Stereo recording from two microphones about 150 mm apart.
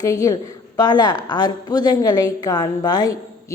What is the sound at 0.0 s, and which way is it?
A woman's voice, 25° left (ahead or behind).